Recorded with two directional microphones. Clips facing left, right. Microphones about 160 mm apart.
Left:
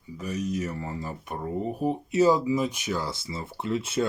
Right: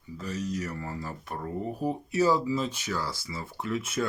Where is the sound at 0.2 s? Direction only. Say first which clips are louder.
Left 3 dB; 15° left (ahead or behind).